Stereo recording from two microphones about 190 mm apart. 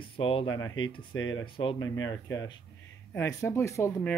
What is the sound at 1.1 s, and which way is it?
Speech, 90° left.